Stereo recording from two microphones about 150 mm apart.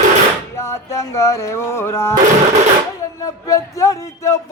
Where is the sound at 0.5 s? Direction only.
20° left (ahead or behind).